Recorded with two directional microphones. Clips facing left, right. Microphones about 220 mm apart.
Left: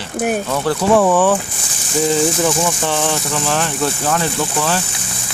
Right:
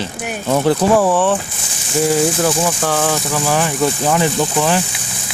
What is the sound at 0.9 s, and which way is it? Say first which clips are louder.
Speech: left 1 dB; centre (ahead or behind).